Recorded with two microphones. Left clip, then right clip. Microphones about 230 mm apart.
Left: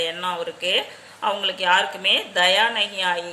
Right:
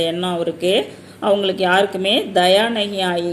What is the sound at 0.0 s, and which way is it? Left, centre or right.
Speech, centre.